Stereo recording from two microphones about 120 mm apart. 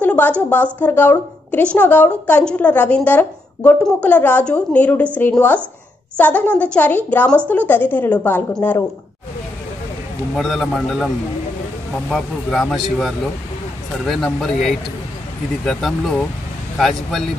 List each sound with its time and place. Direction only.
0.0 s a sound: 15° left (ahead or behind)
0.5 s a woman's voice: 15° left (ahead or behind)
10.3 s speech: centre (ahead or behind)
12.1 s speech: 5° left (ahead or behind)